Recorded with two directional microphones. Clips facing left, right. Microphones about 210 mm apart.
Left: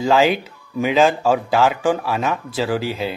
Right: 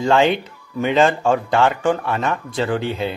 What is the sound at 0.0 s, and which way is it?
Speech, 5° left (ahead or behind).